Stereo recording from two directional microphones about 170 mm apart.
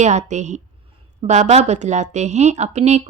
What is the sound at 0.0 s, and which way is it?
A woman's voice, 45° right (ahead or behind).